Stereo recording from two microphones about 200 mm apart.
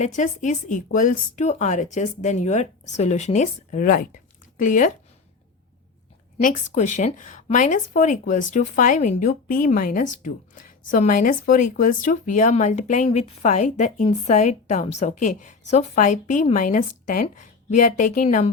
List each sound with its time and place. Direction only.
0.0 s speech: 40° left (ahead or behind)
6.4 s speech: 40° left (ahead or behind)